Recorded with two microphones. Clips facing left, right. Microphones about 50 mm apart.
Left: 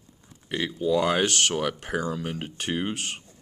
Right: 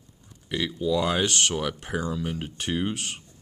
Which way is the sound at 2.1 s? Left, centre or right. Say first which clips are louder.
Even; left.